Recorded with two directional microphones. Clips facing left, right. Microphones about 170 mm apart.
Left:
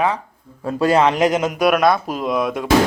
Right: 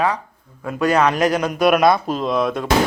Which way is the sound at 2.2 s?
15° left (ahead or behind).